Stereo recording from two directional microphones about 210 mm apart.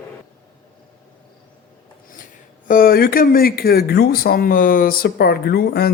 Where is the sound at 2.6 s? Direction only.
45° left (ahead or behind).